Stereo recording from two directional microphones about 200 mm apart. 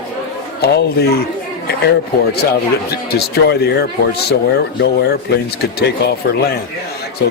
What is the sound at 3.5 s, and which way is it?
A man's voice, 55° left (ahead or behind).